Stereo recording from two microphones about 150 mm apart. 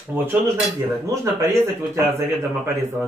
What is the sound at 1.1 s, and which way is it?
Speech, 20° right (ahead or behind).